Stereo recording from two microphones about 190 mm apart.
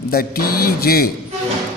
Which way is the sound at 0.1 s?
50° left (ahead or behind).